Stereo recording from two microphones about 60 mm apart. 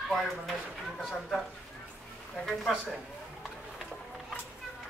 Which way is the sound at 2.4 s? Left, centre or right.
Centre.